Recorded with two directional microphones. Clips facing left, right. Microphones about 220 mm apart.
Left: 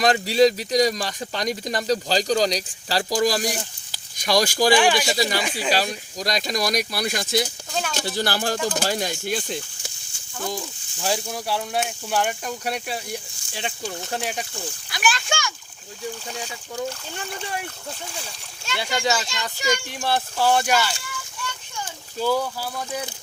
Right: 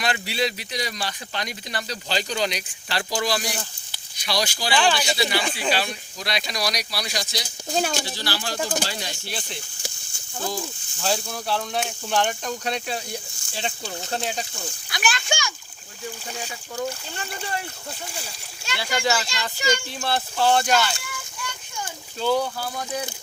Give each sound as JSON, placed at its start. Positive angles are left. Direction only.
{"t": 0.0, "sound": "speech", "side_deg": 40}
{"t": 4.7, "sound": "speech", "side_deg": 15}
{"t": 5.1, "sound": "speech", "side_deg": 40}
{"t": 7.7, "sound": "speech", "side_deg": -35}
{"t": 8.0, "sound": "speech", "side_deg": 50}
{"t": 11.0, "sound": "speech", "side_deg": 15}
{"t": 14.1, "sound": "speech", "side_deg": 10}
{"t": 14.8, "sound": "a child's voice", "side_deg": 0}
{"t": 16.7, "sound": "speech", "side_deg": 15}
{"t": 18.8, "sound": "a child's voice", "side_deg": 20}
{"t": 19.3, "sound": "speech", "side_deg": 0}
{"t": 19.7, "sound": "speech", "side_deg": 15}
{"t": 22.2, "sound": "speech", "side_deg": 5}